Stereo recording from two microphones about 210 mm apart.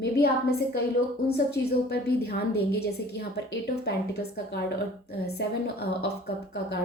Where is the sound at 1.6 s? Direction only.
50° left (ahead or behind).